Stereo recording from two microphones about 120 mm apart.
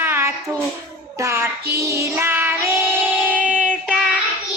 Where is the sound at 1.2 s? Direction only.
25° right (ahead or behind).